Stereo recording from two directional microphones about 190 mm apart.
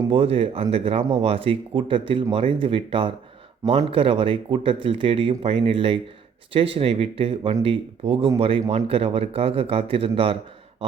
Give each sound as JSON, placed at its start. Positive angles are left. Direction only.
{"t": 0.1, "sound": "speech", "side_deg": -30}